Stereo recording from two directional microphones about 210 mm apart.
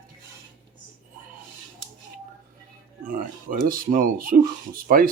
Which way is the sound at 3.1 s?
40° right (ahead or behind).